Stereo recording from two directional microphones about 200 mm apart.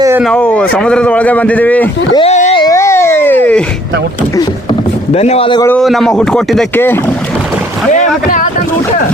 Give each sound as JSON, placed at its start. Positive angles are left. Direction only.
{"t": 0.2, "sound": "a man's voice", "side_deg": 5}
{"t": 2.1, "sound": "a sound", "side_deg": 35}
{"t": 2.6, "sound": "baby cry", "side_deg": 15}
{"t": 5.1, "sound": "speech", "side_deg": 30}
{"t": 5.6, "sound": "speech", "side_deg": 5}
{"t": 7.9, "sound": "speech", "side_deg": 40}